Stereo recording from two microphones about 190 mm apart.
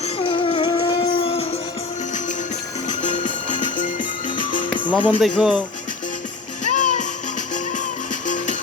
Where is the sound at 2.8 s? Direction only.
40° left (ahead or behind).